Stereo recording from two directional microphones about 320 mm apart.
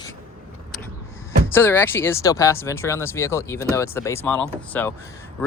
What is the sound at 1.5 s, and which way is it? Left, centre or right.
Speech, centre.